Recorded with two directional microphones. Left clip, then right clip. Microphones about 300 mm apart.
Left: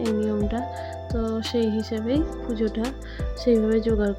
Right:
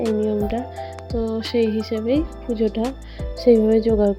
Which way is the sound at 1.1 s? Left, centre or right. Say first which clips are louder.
Right 4 dB; centre.